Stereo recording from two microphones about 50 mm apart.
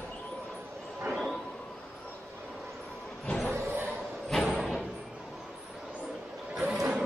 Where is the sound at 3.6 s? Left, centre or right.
Right.